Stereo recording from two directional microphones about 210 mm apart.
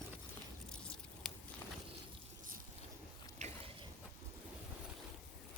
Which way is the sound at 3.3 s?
30° right (ahead or behind).